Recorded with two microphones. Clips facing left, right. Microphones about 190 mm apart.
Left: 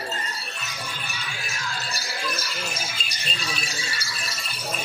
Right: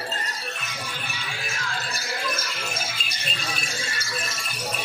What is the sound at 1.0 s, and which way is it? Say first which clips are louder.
Music: right 1 dB; 55° right (ahead or behind).